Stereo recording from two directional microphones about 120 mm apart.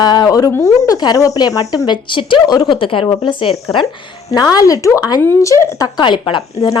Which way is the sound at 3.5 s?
55° left (ahead or behind).